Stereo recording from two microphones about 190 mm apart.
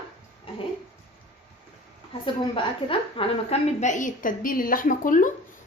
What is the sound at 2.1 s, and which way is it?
A woman's voice, 30° left (ahead or behind).